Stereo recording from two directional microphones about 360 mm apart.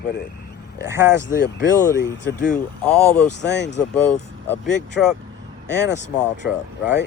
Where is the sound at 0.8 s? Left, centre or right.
Centre.